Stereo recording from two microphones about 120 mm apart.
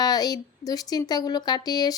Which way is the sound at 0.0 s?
30° left (ahead or behind).